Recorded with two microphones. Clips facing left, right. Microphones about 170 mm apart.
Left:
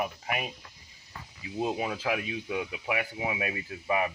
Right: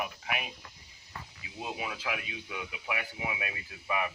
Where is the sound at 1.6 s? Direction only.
35° left (ahead or behind).